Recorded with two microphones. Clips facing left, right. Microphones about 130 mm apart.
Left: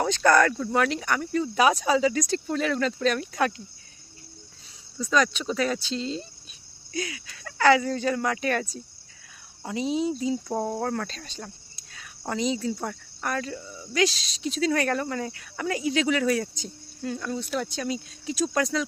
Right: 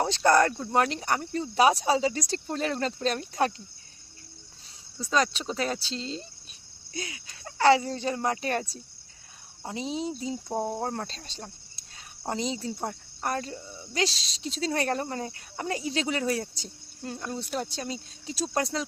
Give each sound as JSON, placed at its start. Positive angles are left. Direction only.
{"t": 0.0, "sound": "speech", "side_deg": -25}
{"t": 4.9, "sound": "speech", "side_deg": -30}
{"t": 11.9, "sound": "cricket", "side_deg": -30}
{"t": 12.8, "sound": "speech", "side_deg": -30}